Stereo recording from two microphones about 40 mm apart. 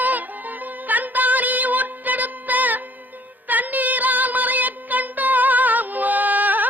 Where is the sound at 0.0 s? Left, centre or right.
Right.